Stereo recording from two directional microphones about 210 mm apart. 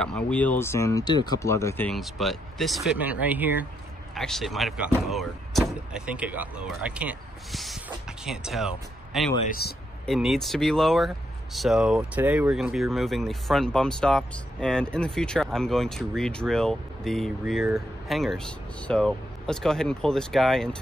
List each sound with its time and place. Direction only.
0.0 s speech: 5° left (ahead or behind)
1.9 s speech: centre (ahead or behind)
9.5 s speech: 50° left (ahead or behind)
10.0 s speech: centre (ahead or behind)